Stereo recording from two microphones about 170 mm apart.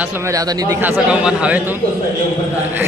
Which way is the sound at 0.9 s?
5° right (ahead or behind).